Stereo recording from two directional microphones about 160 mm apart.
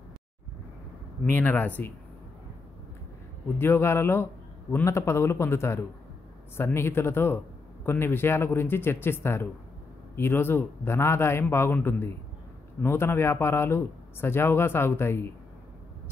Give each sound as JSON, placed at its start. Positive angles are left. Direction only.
{"t": 1.2, "sound": "speech", "side_deg": 10}
{"t": 3.5, "sound": "speech", "side_deg": 15}